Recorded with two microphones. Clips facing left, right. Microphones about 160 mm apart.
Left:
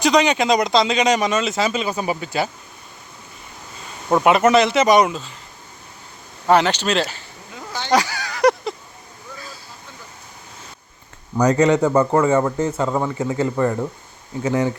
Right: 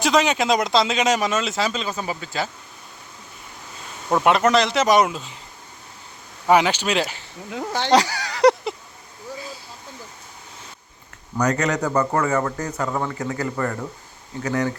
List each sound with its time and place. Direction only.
0.0 s speech: centre (ahead or behind); by 2.5 s 15° left (ahead or behind)
4.1 s speech: 5° left (ahead or behind)
6.5 s speech: 10° right (ahead or behind)
7.5 s speech: 70° right (ahead or behind)
7.9 s speech: 35° right (ahead or behind)
11.4 s a man's voice: 30° left (ahead or behind)